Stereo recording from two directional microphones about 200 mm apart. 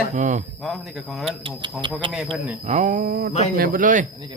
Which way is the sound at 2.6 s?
35° right (ahead or behind).